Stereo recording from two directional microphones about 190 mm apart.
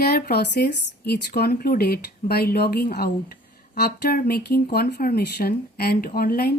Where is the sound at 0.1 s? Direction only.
60° left (ahead or behind).